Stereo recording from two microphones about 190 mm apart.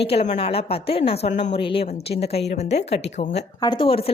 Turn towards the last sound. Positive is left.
turn(degrees=30)  # may be behind; listen again after turning